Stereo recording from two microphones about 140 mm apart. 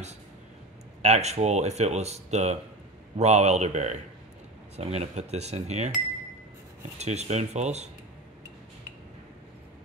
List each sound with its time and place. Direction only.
1.0 s speech: 50° right (ahead or behind)
7.0 s speech: 50° right (ahead or behind)